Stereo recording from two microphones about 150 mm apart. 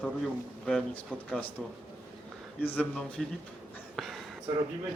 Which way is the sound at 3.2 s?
Centre (ahead or behind).